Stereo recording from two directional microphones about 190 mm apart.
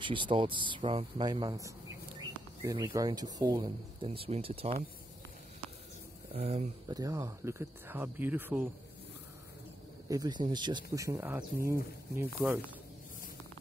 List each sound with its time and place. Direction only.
0.0 s speech: 25° right (ahead or behind)
6.3 s speech: 35° right (ahead or behind)
6.9 s speech: 20° right (ahead or behind)
10.0 s speech: 20° right (ahead or behind)